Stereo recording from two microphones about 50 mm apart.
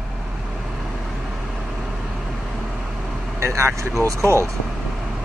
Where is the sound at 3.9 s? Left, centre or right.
Right.